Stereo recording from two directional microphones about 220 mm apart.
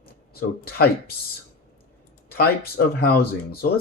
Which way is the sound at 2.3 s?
45° left (ahead or behind).